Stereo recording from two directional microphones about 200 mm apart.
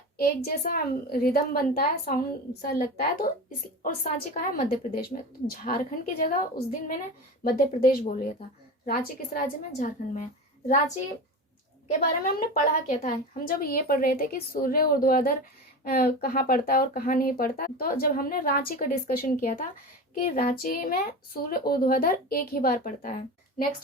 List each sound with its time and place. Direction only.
0.2 s speech: 50° left (ahead or behind)
9.7 s a woman's voice: 35° left (ahead or behind)
12.0 s speech: 50° left (ahead or behind)